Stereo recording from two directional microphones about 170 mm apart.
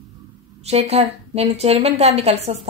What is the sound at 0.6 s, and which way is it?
A woman's voice, 40° right (ahead or behind).